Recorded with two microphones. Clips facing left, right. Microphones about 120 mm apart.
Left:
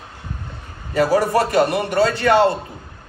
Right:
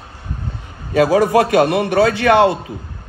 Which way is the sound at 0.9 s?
90° right.